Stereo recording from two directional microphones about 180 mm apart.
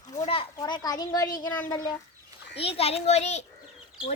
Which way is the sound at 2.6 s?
35° left (ahead or behind).